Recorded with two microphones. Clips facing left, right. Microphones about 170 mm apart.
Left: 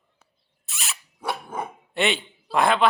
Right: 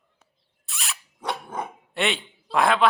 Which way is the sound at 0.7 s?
Centre (ahead or behind).